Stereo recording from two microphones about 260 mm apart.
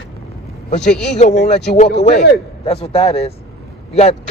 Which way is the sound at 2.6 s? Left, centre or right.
Left.